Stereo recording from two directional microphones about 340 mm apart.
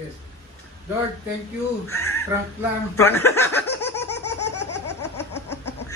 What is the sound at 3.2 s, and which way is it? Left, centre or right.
Speech, centre.